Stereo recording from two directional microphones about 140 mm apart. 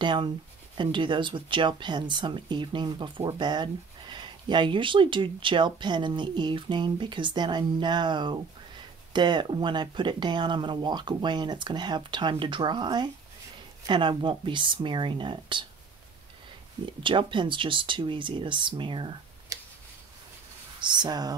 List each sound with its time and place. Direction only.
0.0 s speech: 35° right (ahead or behind)
17.0 s speech: 35° right (ahead or behind)
20.8 s speech: 30° right (ahead or behind)